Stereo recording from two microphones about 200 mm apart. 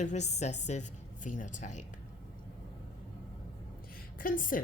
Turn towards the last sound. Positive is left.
turn(degrees=40)  # may be behind; listen again after turning